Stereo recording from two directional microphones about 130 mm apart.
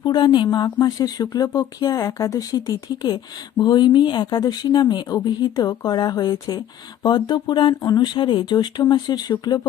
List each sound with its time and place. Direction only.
0.0 s a woman's voice: 35° left (ahead or behind)